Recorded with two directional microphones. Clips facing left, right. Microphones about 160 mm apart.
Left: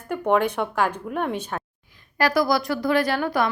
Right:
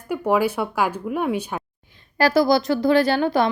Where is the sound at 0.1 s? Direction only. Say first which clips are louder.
Right 1 dB; 5° right (ahead or behind).